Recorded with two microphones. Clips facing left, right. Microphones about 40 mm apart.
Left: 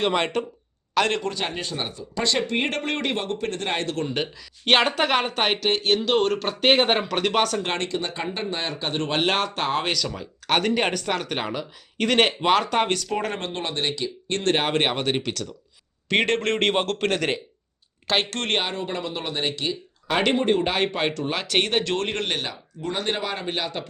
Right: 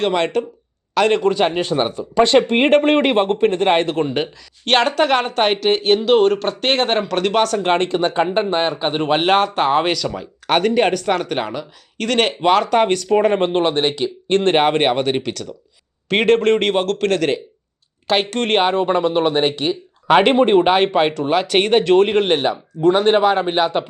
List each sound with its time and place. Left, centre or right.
0.0 s speech: centre
1.1 s speech: right
4.6 s speech: centre
7.8 s speech: right
8.7 s speech: right; by 13.1 s centre
13.1 s speech: centre
13.5 s speech: right
14.6 s speech: centre
16.0 s speech: centre
16.6 s speech: centre
18.1 s speech: centre
18.8 s speech: right
19.5 s speech: right
22.3 s speech: right